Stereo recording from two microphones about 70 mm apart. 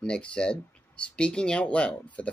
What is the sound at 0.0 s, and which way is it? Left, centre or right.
Speech, centre.